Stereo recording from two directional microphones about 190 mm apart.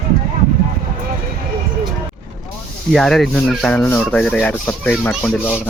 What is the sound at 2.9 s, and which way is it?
Rub, centre (ahead or behind).